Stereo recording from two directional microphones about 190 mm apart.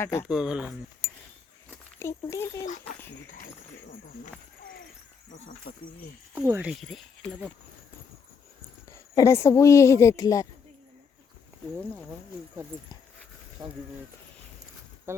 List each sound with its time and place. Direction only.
0.0 s speech: 15° left (ahead or behind)
0.3 s speech: 5° right (ahead or behind)
2.0 s speech: 15° left (ahead or behind)
5.7 s speech: 50° left (ahead or behind)
6.3 s speech: 10° right (ahead or behind)
6.7 s speech: centre (ahead or behind)
9.1 s speech: 15° left (ahead or behind)
13.6 s speech: 20° right (ahead or behind)